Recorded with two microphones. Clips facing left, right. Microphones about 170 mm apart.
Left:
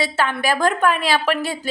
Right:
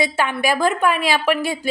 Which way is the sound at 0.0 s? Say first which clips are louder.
Right 1 dB; 10° right (ahead or behind).